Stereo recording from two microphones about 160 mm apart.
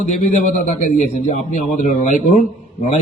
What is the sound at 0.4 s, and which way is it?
A man's voice, 50° left (ahead or behind).